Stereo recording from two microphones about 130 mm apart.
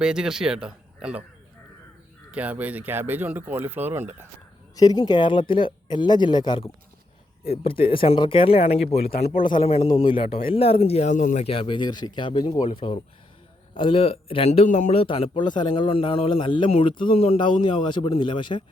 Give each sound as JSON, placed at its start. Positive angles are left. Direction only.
{"t": 0.0, "sound": "speech", "side_deg": -5}
{"t": 2.3, "sound": "speech", "side_deg": -10}
{"t": 4.7, "sound": "speech", "side_deg": 30}
{"t": 7.4, "sound": "speech", "side_deg": 50}
{"t": 11.4, "sound": "speech", "side_deg": 45}
{"t": 15.0, "sound": "speech", "side_deg": 45}